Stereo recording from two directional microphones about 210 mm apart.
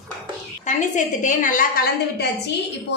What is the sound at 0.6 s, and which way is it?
A woman's voice, 35° left (ahead or behind).